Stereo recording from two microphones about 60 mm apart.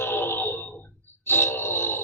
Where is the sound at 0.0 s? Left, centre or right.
Left.